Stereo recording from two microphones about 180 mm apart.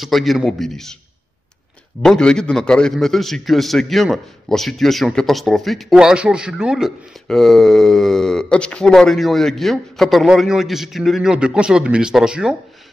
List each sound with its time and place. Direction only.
0.0 s a man's voice: centre (ahead or behind)
2.0 s a man's voice: 5° left (ahead or behind)